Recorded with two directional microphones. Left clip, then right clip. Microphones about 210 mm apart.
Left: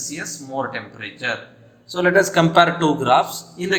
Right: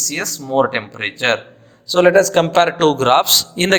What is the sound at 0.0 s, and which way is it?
A man's voice, 55° right (ahead or behind).